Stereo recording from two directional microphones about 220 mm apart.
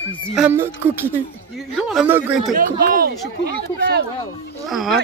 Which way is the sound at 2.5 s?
40° right (ahead or behind).